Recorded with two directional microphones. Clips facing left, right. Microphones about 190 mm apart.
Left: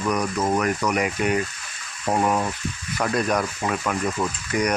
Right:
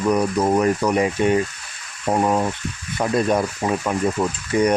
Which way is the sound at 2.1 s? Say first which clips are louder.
Right 3 dB; 15° right (ahead or behind).